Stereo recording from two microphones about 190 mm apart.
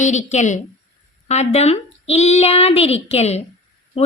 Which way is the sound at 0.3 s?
40° left (ahead or behind).